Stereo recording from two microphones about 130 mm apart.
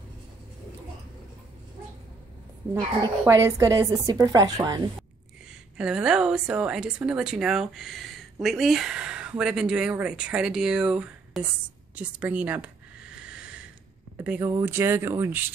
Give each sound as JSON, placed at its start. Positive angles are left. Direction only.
{"t": 2.7, "sound": "a woman's voice", "side_deg": -25}
{"t": 5.8, "sound": "a woman's voice", "side_deg": -5}
{"t": 11.9, "sound": "a sound", "side_deg": -10}
{"t": 14.1, "sound": "a woman's voice", "side_deg": -15}